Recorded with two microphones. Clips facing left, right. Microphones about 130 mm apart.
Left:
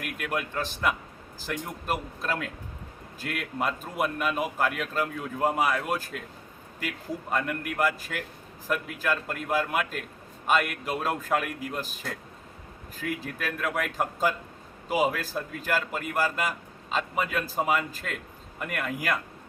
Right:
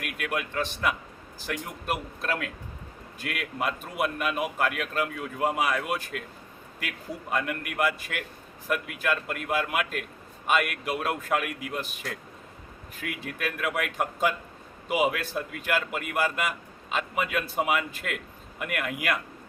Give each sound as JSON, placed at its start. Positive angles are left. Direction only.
{"t": 0.0, "sound": "speech", "side_deg": -5}
{"t": 3.2, "sound": "speech", "side_deg": -5}